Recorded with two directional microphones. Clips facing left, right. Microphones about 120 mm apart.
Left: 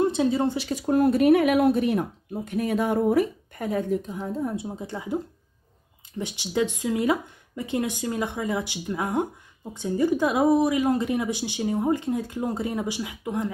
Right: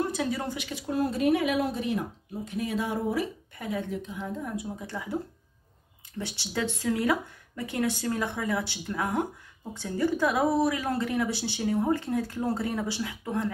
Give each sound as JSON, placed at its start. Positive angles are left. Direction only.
{"t": 0.0, "sound": "speech", "side_deg": 25}